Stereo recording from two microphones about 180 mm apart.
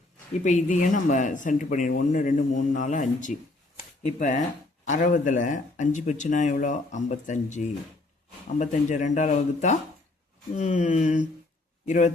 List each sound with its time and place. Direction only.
0.4 s speech: 45° left (ahead or behind)
3.8 s shuffling cards: 40° left (ahead or behind)
4.9 s speech: 45° left (ahead or behind)